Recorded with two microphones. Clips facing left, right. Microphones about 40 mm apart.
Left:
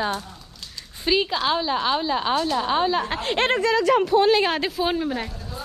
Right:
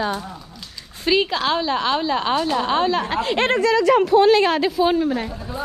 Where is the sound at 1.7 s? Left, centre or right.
Right.